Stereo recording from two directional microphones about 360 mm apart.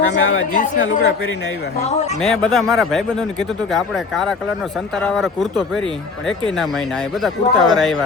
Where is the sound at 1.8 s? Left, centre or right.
Centre.